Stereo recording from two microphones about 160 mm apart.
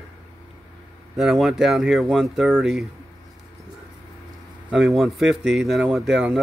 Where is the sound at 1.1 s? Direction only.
Centre (ahead or behind).